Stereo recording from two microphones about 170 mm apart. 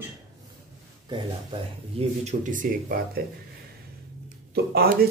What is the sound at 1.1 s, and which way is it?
Speech, 35° right (ahead or behind).